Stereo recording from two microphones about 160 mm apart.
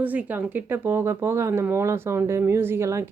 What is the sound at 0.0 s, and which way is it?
Speech, 10° right (ahead or behind).